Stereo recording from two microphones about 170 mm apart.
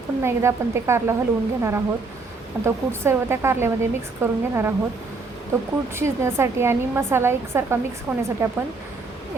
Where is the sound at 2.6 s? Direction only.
15° right (ahead or behind).